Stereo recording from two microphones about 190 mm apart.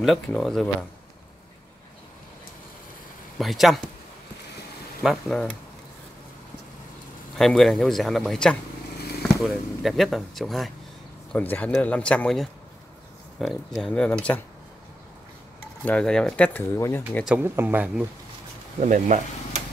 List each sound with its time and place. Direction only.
0.0 s speech: centre (ahead or behind)
3.3 s speech: centre (ahead or behind)
5.0 s speech: centre (ahead or behind)
7.3 s speech: centre (ahead or behind)
15.8 s speech: 5° left (ahead or behind)
17.3 s speech: 10° right (ahead or behind)
18.8 s speech: 40° right (ahead or behind)